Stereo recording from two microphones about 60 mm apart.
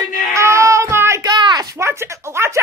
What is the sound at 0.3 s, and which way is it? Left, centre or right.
Child singing, right.